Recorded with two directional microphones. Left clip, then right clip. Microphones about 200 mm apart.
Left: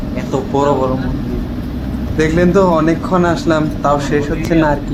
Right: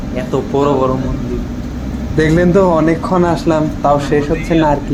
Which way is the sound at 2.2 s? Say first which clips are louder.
Right 2 dB; 30° right (ahead or behind).